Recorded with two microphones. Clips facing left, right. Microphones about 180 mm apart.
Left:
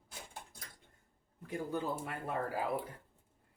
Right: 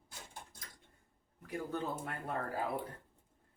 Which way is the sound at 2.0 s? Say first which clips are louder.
Left 2 dB; 5° left (ahead or behind).